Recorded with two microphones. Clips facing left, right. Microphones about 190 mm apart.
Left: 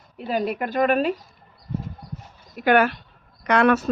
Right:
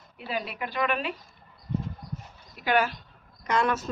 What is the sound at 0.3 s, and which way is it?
Speech, 45° left (ahead or behind).